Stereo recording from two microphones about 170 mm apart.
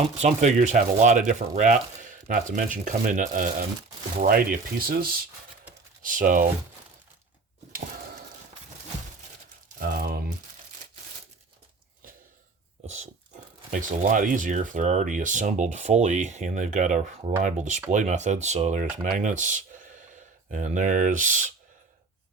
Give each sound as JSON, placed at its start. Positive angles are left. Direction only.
{"t": 0.2, "sound": "speech", "side_deg": -45}
{"t": 9.7, "sound": "crumpling", "side_deg": -60}
{"t": 12.8, "sound": "pig", "side_deg": -45}
{"t": 13.7, "sound": "speech", "side_deg": -50}